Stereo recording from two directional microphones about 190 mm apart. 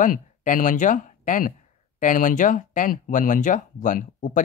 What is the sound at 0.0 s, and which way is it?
Speech, 45° left (ahead or behind).